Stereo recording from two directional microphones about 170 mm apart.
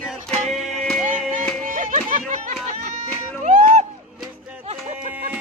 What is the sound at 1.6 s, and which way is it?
Music, 50° right (ahead or behind).